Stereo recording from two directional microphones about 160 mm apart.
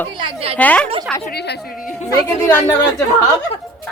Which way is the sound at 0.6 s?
10° left (ahead or behind).